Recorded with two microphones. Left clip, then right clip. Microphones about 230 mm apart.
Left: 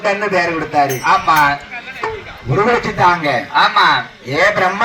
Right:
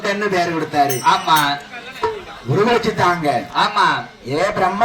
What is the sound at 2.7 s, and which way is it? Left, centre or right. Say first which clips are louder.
A man's voice: left 4 dB; right.